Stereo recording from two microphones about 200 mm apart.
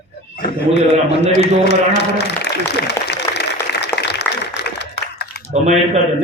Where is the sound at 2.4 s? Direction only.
60° left (ahead or behind).